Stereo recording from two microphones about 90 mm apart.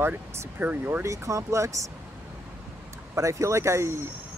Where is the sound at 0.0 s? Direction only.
30° right (ahead or behind).